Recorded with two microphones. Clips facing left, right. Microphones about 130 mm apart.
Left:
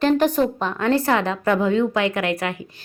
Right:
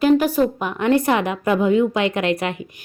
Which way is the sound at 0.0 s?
5° right (ahead or behind).